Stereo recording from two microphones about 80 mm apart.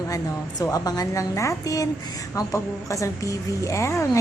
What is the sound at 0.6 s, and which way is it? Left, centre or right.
A woman's voice, left.